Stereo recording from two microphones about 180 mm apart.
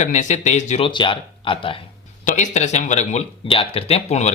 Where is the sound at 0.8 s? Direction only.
25° left (ahead or behind).